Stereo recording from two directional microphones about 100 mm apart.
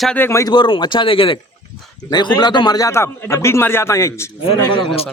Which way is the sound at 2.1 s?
45° left (ahead or behind).